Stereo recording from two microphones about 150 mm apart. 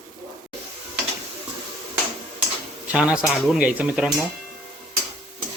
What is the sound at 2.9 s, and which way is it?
Speech, 5° right (ahead or behind).